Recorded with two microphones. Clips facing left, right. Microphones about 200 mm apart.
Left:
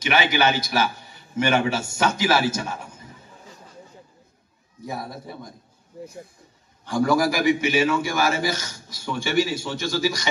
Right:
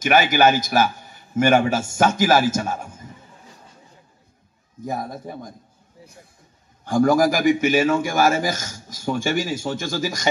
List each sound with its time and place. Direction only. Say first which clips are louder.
0.0 s a man's voice: right 5 dB; 45° right (ahead or behind)
4.8 s a man's voice: right 4 dB; 45° right (ahead or behind)
6.8 s a man's voice: right 4 dB; 45° right (ahead or behind)